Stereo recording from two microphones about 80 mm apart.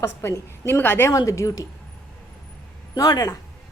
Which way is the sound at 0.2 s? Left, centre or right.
Left.